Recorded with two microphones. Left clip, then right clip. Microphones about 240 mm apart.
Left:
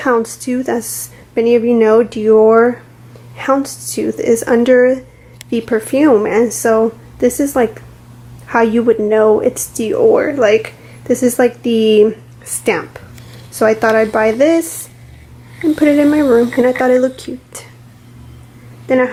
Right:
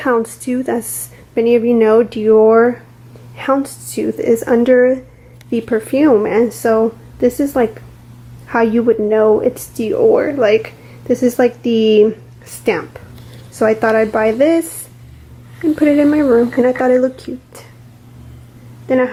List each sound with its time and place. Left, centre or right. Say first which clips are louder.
0.4 s speech: left 1 dB; centre
15.7 s a woman's voice: left 1 dB; centre
18.9 s speech: left 1 dB; centre